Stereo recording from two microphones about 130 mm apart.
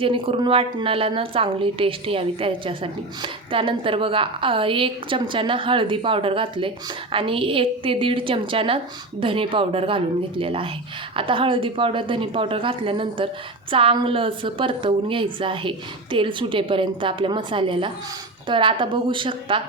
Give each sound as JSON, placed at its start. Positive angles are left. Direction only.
{"t": 0.0, "sound": "a woman's voice", "side_deg": -45}